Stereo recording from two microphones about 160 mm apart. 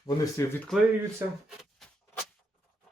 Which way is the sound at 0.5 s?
5° left (ahead or behind).